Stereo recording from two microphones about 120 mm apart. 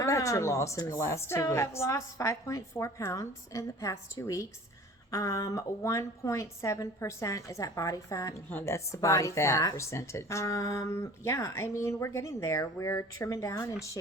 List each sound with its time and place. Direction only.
0.0 s speech: 25° left (ahead or behind)